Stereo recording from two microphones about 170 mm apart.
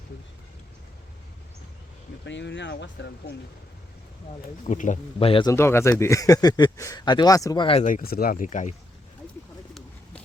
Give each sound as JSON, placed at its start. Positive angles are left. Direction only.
{"t": 2.2, "sound": "speech", "side_deg": 90}
{"t": 4.6, "sound": "speech", "side_deg": 45}
{"t": 5.2, "sound": "a man's voice", "side_deg": 30}
{"t": 5.5, "sound": "speech", "side_deg": 15}